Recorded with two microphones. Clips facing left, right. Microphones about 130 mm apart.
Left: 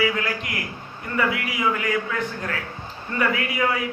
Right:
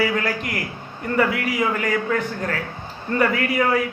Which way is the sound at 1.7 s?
45° right (ahead or behind).